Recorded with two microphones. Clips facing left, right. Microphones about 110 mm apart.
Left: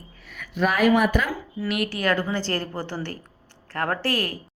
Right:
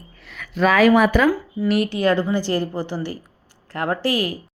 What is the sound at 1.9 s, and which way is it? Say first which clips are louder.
A woman's voice: right 5 dB; 20° right (ahead or behind).